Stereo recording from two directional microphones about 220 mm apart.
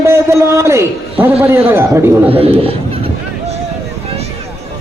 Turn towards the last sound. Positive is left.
turn(degrees=-25)  # may be behind; listen again after turning